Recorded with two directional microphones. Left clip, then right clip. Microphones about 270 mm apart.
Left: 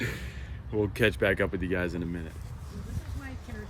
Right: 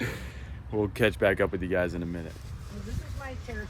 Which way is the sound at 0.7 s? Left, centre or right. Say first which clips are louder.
Even; centre.